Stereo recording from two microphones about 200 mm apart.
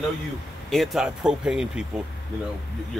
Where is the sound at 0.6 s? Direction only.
Centre (ahead or behind).